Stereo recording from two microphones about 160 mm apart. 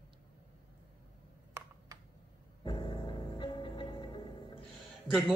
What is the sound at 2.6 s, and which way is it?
Music, 30° left (ahead or behind).